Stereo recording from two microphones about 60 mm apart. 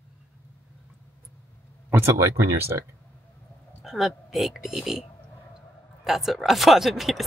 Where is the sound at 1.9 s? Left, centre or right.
Right.